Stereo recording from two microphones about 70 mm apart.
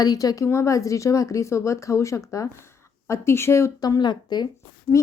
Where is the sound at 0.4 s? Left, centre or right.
Left.